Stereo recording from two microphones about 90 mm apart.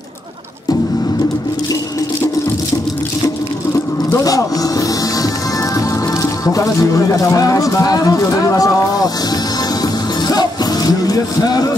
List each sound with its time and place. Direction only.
4.2 s music: 40° left (ahead or behind)
5.8 s speech: 40° left (ahead or behind)
10.2 s music: 45° left (ahead or behind)